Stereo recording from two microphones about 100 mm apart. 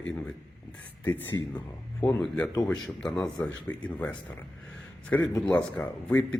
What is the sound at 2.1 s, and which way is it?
Speech, 10° left (ahead or behind).